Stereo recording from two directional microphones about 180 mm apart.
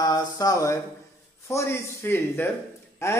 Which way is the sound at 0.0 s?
20° left (ahead or behind).